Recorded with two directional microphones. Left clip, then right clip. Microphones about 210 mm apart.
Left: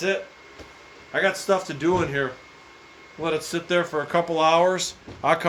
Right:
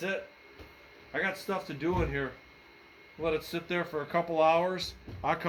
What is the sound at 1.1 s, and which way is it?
Speech, 35° left (ahead or behind).